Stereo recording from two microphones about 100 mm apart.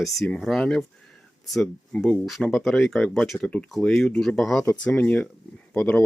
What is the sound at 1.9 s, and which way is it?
Speech, 5° left (ahead or behind).